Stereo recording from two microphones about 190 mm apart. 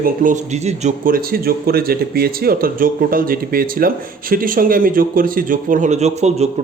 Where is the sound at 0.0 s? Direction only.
45° right (ahead or behind).